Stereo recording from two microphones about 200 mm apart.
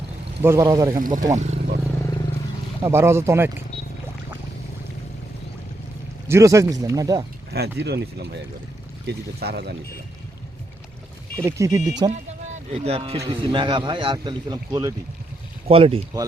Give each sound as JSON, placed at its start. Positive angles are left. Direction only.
{"t": 0.4, "sound": "a man's voice", "side_deg": -15}
{"t": 1.4, "sound": "vehicle", "side_deg": -35}
{"t": 2.8, "sound": "speech", "side_deg": -15}
{"t": 6.2, "sound": "speech", "side_deg": -15}
{"t": 7.5, "sound": "speech", "side_deg": -55}
{"t": 11.4, "sound": "a man's voice", "side_deg": -15}
{"t": 15.6, "sound": "a man's voice", "side_deg": -30}